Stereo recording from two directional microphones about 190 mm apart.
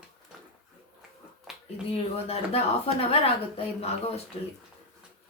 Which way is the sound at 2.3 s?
30° left (ahead or behind).